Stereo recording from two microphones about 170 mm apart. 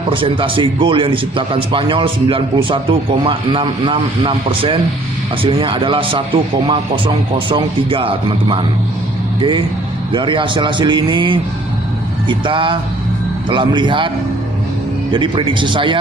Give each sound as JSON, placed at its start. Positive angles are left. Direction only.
{"t": 0.1, "sound": "a man's voice", "side_deg": -30}
{"t": 15.1, "sound": "a man's voice", "side_deg": -30}